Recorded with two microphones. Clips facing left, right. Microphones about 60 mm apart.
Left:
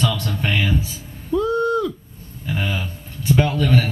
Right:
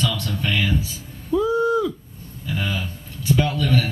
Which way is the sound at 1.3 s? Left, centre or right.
Centre.